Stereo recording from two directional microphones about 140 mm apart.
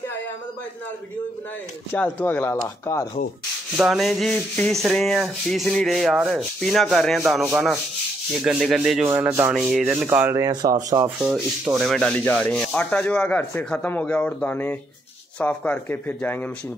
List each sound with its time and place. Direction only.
2.0 s sanding: 10° left (ahead or behind)
3.7 s rub: centre (ahead or behind)
10.0 s speech: 20° right (ahead or behind)
11.1 s sanding: 5° right (ahead or behind); by 16.4 s 15° left (ahead or behind)